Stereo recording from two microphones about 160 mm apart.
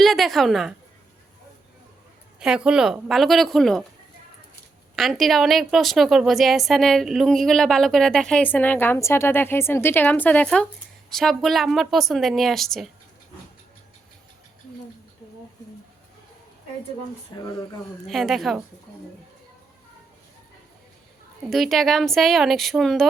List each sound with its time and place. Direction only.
0.0 s a woman's voice: centre (ahead or behind)
2.4 s a woman's voice: 5° right (ahead or behind)
4.9 s a woman's voice: centre (ahead or behind)
17.3 s speech: 25° left (ahead or behind)
18.0 s a woman's voice: centre (ahead or behind)
21.5 s a woman's voice: centre (ahead or behind)